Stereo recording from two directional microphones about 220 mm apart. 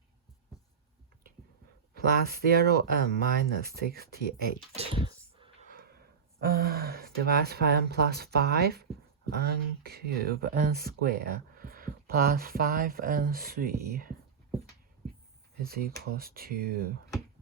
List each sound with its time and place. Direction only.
2.0 s speech: 45° right (ahead or behind)
4.7 s a sound: 25° right (ahead or behind)
6.4 s speech: 45° right (ahead or behind)
15.6 s speech: 45° right (ahead or behind)